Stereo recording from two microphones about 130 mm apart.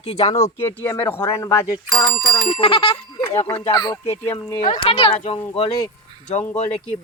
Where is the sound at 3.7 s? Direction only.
30° left (ahead or behind).